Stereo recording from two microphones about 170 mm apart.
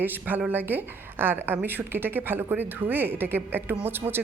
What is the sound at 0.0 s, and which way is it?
A woman's voice, 10° right (ahead or behind).